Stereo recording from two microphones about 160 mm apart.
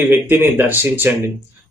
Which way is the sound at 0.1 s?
15° right (ahead or behind).